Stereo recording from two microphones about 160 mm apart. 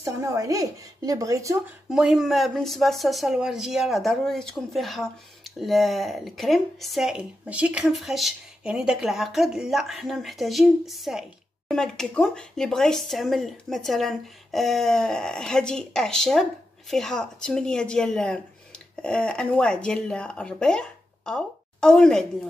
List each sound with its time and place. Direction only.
0.0 s a woman's voice: 20° right (ahead or behind)
1.9 s speech: 5° right (ahead or behind)